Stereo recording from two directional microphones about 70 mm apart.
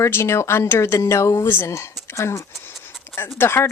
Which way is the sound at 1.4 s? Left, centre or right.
Left.